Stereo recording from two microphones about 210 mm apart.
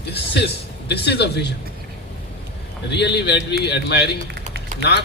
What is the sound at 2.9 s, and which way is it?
A man's voice, 55° left (ahead or behind).